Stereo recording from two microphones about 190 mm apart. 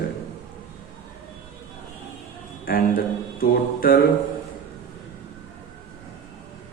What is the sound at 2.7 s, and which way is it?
Mantra, 50° left (ahead or behind).